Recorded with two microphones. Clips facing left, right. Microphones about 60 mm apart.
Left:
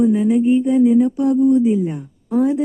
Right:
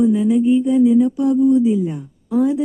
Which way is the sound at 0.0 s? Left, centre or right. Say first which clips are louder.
Even; left.